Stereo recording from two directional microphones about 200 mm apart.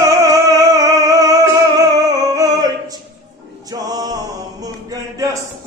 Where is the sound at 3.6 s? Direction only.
20° right (ahead or behind).